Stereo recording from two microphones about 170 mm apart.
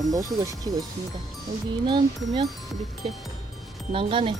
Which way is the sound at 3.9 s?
30° right (ahead or behind).